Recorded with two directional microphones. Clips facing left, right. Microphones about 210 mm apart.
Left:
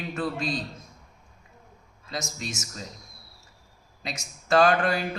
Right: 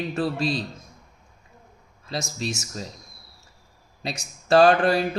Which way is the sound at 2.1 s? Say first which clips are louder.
Right 5 dB; 30° right (ahead or behind).